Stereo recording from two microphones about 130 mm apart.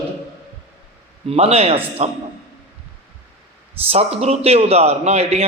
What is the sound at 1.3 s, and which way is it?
Speech, 50° right (ahead or behind).